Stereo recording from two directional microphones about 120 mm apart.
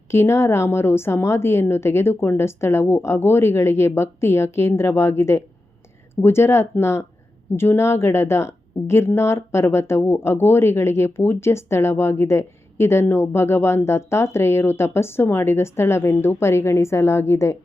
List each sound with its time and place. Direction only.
0.1 s a woman's voice: 20° left (ahead or behind)